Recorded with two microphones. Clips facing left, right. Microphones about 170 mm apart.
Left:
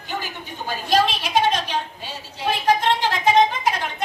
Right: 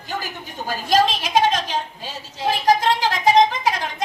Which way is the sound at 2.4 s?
40° right (ahead or behind).